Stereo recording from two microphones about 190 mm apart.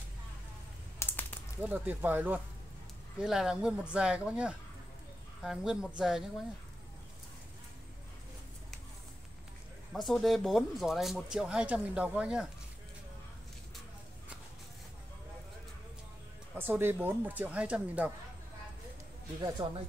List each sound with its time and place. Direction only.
0.9 s typing: 10° left (ahead or behind)
1.6 s speech: 10° right (ahead or behind)
9.9 s speech: centre (ahead or behind)
16.5 s speech: 10° right (ahead or behind)
19.6 s speech: 20° right (ahead or behind)